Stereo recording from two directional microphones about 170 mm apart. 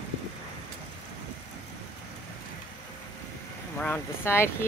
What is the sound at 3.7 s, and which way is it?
Speech, 10° left (ahead or behind).